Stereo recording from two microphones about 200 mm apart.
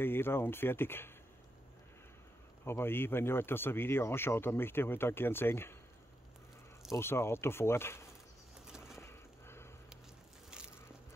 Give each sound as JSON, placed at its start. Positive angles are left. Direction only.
{"t": 0.0, "sound": "speech", "side_deg": 10}
{"t": 2.6, "sound": "speech", "side_deg": 10}
{"t": 7.0, "sound": "speech", "side_deg": 10}
{"t": 8.6, "sound": "bird", "side_deg": -5}
{"t": 9.0, "sound": "a sound", "side_deg": 10}